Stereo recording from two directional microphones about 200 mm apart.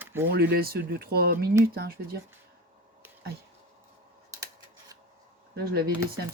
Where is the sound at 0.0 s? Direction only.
10° right (ahead or behind).